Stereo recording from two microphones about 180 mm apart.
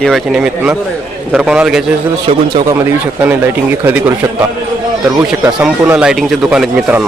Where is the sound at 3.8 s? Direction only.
10° right (ahead or behind).